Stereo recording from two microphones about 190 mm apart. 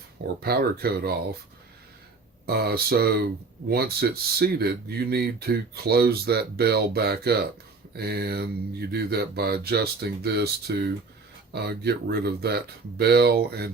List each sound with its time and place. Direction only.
0.3 s speech: 55° right (ahead or behind)
2.5 s speech: 55° right (ahead or behind)